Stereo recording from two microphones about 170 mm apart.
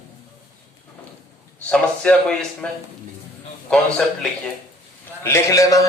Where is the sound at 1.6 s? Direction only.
5° left (ahead or behind).